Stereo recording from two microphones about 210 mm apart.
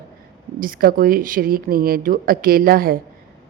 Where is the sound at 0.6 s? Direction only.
45° right (ahead or behind).